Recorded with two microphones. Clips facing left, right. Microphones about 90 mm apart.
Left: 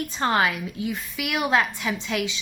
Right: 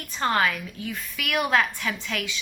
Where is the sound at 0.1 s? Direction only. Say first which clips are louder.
Even; 25° left (ahead or behind).